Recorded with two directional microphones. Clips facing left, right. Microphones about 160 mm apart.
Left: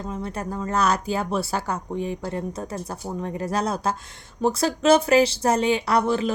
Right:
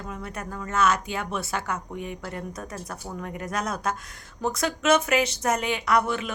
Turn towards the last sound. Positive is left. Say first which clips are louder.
# left 3 dB
turn(degrees=30)  # may be behind; listen again after turning